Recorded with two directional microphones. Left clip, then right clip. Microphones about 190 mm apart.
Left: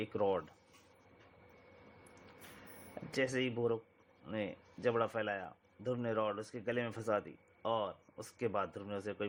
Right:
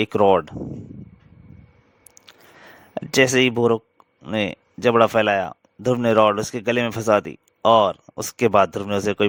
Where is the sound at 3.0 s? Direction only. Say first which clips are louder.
Right 19 dB; 60° right (ahead or behind).